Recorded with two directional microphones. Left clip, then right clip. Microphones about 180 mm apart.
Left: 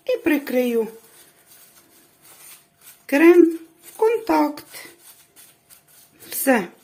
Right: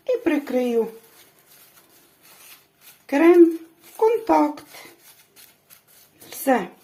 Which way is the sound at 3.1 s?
30° left (ahead or behind).